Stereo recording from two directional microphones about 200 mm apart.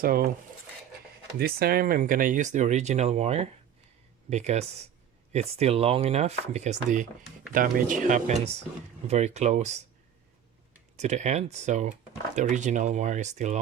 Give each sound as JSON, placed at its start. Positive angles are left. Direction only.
{"t": 0.0, "sound": "speech", "side_deg": -50}
{"t": 1.4, "sound": "speech", "side_deg": -50}
{"t": 10.9, "sound": "speech", "side_deg": -35}